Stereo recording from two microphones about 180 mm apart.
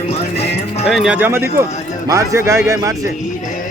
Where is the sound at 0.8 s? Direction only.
5° right (ahead or behind).